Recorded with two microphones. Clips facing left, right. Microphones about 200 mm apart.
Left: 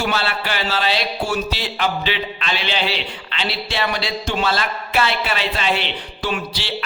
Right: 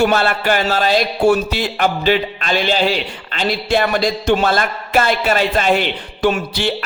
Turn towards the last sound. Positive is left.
turn(degrees=-50)  # may be behind; listen again after turning